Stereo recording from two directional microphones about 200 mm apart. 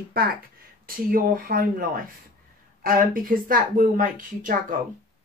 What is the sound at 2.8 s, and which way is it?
A woman's voice, 45° right (ahead or behind).